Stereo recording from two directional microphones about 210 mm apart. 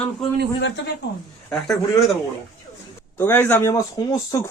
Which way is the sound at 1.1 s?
55° left (ahead or behind).